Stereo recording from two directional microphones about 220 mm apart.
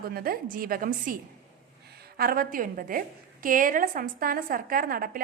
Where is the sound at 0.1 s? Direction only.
40° right (ahead or behind).